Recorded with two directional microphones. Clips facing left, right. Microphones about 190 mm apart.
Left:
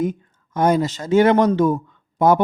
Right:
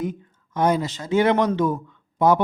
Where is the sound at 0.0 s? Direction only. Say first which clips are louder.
Left 5 dB; 45° left (ahead or behind).